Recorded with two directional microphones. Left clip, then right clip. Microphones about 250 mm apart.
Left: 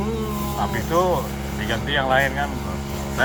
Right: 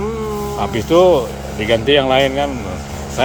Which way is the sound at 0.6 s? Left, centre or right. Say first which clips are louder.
Right 9 dB; right.